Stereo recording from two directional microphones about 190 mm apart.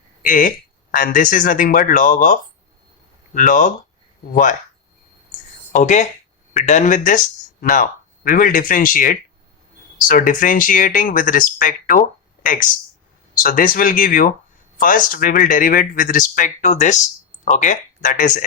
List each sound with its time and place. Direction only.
0.2 s speech: 45° left (ahead or behind)
5.7 s speech: 40° left (ahead or behind)